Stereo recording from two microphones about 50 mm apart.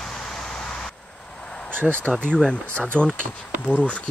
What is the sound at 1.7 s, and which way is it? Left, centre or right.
Speech, right.